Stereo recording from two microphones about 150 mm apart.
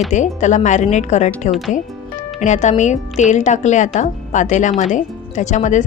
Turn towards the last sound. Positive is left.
turn(degrees=55)  # may be behind; listen again after turning